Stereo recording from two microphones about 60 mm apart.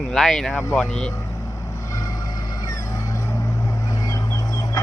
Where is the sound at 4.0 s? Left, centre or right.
Left.